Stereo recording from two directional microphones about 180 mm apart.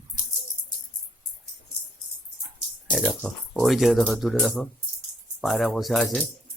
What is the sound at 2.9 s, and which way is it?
Speech, centre (ahead or behind).